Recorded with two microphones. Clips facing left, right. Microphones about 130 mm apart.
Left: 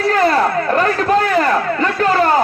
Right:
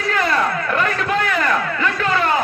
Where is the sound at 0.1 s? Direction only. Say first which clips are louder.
Left 4 dB; 30° left (ahead or behind).